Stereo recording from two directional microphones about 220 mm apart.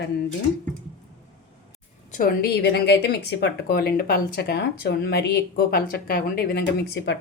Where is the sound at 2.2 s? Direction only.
45° left (ahead or behind).